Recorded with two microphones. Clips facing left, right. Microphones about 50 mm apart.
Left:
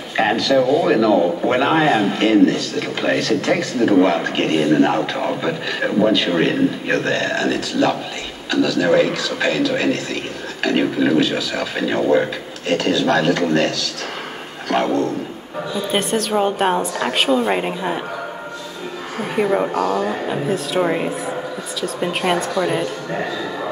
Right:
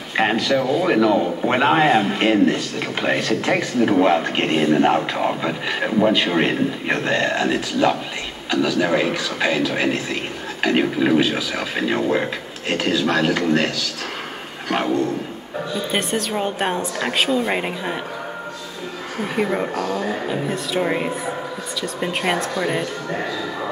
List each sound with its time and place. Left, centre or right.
0.1 s a man's voice: centre
15.9 s a woman's voice: centre
19.3 s a woman's voice: centre
19.7 s speech: left
20.0 s a woman's voice: centre